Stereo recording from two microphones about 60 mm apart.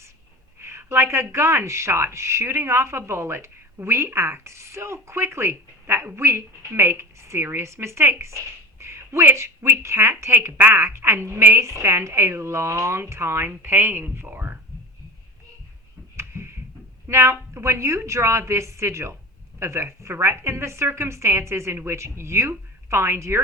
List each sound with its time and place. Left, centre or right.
0.6 s a woman's voice: right
16.1 s a sound: right
17.1 s speech: right